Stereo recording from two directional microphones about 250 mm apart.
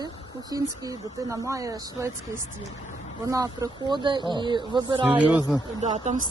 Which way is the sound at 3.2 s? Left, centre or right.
Centre.